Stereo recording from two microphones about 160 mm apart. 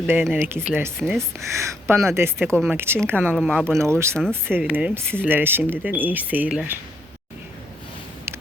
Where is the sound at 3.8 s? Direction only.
15° right (ahead or behind).